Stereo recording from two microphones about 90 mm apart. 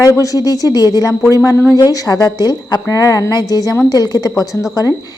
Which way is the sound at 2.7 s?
30° left (ahead or behind).